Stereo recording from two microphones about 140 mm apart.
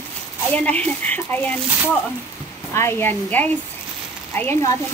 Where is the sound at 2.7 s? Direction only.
20° left (ahead or behind).